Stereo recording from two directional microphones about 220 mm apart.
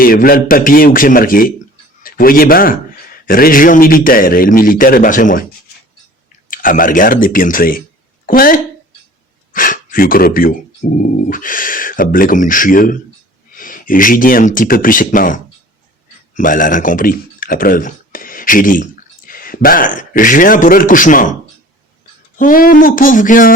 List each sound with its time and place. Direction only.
0.0 s a man's voice: 40° left (ahead or behind)
6.5 s a man's voice: 40° left (ahead or behind)
22.4 s a man's voice: 40° left (ahead or behind)